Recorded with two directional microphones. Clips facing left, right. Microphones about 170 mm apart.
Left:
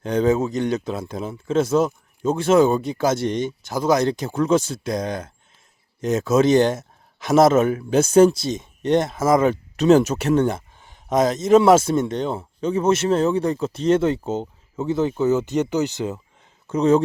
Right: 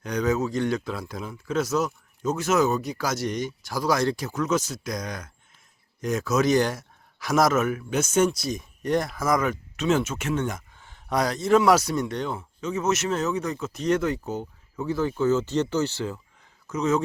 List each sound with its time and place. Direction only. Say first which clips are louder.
0.0 s a man's voice: left 6 dB; 25° left (ahead or behind)
10.8 s a man's voice: left 5 dB; 20° left (ahead or behind)
16.6 s speech: left 7 dB; 30° left (ahead or behind)